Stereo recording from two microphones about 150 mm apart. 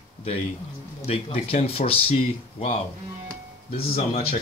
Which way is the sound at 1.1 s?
40° left (ahead or behind).